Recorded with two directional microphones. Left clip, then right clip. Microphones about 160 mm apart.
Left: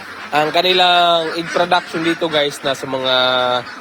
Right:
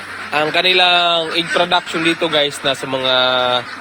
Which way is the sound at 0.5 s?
20° left (ahead or behind).